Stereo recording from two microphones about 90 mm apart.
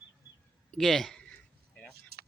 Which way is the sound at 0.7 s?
5° left (ahead or behind).